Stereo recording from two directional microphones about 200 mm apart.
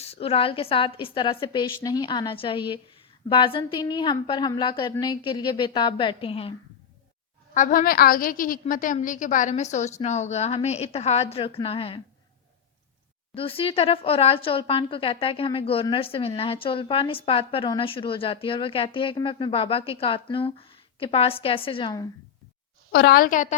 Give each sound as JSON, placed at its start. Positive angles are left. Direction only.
{"t": 0.0, "sound": "a woman's voice", "side_deg": 30}
{"t": 7.5, "sound": "a woman's voice", "side_deg": 40}
{"t": 13.3, "sound": "a woman's voice", "side_deg": 25}
{"t": 22.9, "sound": "a woman's voice", "side_deg": 50}